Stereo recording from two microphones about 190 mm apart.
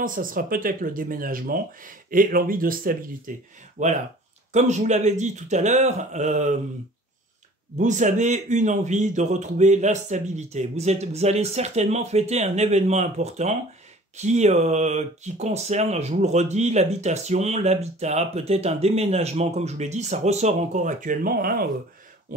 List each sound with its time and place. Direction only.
0.0 s speech: 45° right (ahead or behind)
7.7 s speech: 40° right (ahead or behind)